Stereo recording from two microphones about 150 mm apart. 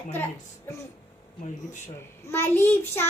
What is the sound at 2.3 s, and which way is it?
Child singing, 15° left (ahead or behind).